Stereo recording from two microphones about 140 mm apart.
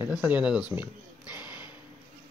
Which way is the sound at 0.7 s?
10° right (ahead or behind).